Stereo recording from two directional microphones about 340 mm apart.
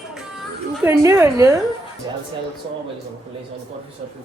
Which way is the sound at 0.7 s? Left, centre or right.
Centre.